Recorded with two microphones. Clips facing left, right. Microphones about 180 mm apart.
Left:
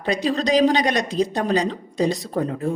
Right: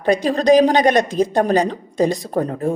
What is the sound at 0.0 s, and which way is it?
Speech, 50° right (ahead or behind).